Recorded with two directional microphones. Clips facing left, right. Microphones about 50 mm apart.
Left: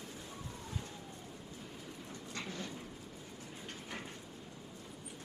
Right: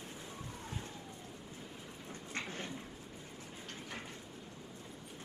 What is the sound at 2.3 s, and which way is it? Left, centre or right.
Dog, right.